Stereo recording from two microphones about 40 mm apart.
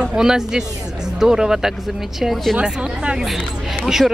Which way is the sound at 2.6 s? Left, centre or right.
Right.